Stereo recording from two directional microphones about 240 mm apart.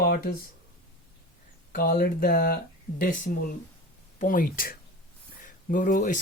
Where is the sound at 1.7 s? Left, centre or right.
Left.